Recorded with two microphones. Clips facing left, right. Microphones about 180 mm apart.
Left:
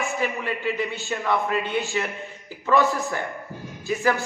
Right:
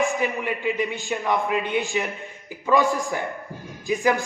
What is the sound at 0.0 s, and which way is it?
Speech, 15° right (ahead or behind).